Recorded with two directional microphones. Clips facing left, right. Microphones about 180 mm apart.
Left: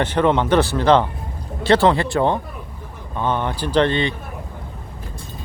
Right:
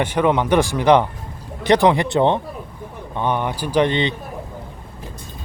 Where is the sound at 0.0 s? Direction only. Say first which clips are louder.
Even; 10° right (ahead or behind).